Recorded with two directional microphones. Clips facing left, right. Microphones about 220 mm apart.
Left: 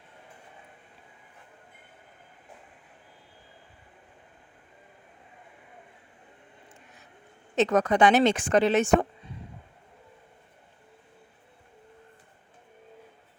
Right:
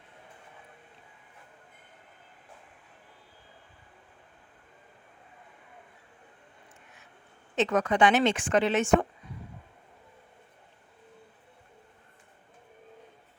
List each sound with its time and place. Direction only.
7.5 s speech: 40° left (ahead or behind)